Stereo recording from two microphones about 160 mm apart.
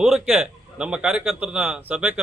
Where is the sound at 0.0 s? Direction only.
5° right (ahead or behind).